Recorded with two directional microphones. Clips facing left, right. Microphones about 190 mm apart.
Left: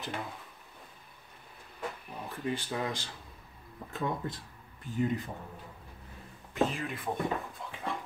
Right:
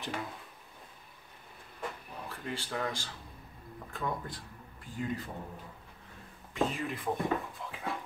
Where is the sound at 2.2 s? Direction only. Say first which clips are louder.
Left 5 dB; 20° left (ahead or behind).